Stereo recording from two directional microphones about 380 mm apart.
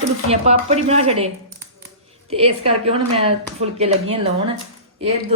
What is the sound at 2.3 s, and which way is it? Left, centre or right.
Speech, centre.